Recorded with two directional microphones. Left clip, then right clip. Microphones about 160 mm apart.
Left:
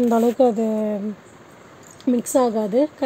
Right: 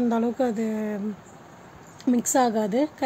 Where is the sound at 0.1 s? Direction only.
15° left (ahead or behind).